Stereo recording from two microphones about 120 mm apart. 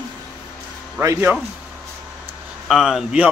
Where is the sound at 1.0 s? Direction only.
25° right (ahead or behind).